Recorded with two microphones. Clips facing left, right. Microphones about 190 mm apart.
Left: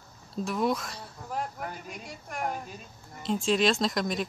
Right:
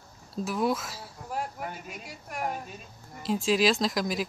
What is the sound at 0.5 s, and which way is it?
Speech, centre (ahead or behind).